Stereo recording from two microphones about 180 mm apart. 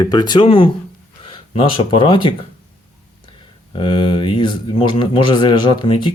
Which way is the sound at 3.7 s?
30° left (ahead or behind).